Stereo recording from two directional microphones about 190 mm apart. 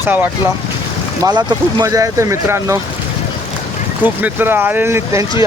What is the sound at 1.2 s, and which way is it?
Speech, 20° right (ahead or behind).